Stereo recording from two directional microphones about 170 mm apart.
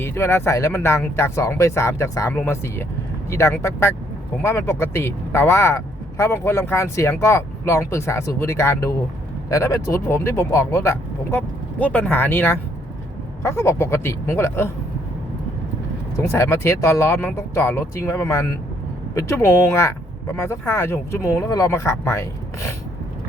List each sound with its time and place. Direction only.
0.0 s speech: 15° left (ahead or behind)
16.1 s speech: 15° left (ahead or behind)